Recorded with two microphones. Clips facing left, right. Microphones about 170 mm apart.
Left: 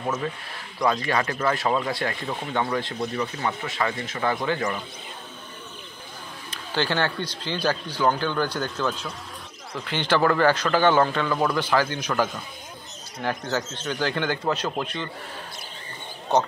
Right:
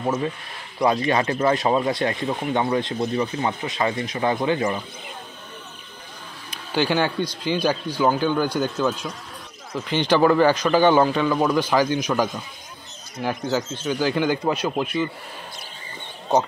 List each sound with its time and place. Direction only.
0.0 s speech: 25° right (ahead or behind)
6.5 s a man's voice: 10° right (ahead or behind)